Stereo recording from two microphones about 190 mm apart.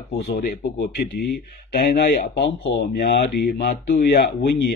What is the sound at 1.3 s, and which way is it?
Speech, 50° left (ahead or behind).